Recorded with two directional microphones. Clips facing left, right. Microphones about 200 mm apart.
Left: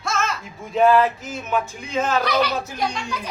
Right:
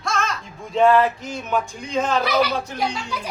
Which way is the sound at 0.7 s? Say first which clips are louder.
Even; 5° left (ahead or behind).